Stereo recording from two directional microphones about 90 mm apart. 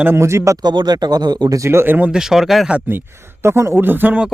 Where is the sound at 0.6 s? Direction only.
55° right (ahead or behind).